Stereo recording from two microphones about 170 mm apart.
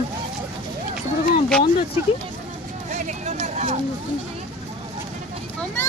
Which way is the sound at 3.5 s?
40° right (ahead or behind).